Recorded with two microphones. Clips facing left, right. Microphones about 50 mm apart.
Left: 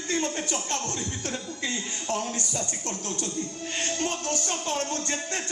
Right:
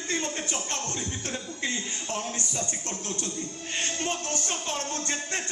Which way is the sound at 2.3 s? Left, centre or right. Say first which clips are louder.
Left 1 dB; right.